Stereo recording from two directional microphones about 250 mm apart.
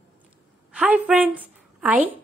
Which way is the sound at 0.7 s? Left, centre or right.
Centre.